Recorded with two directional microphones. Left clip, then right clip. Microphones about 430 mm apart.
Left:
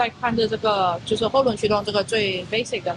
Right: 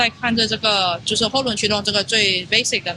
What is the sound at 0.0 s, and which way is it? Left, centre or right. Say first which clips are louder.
Speech: right 3 dB; right.